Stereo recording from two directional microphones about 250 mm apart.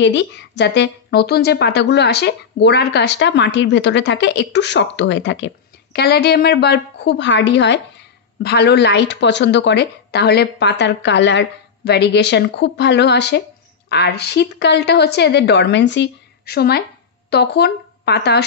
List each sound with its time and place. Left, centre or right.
0.0 s a woman's voice: left